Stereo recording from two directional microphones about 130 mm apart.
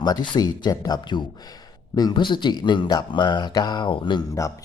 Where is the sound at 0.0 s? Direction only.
30° left (ahead or behind).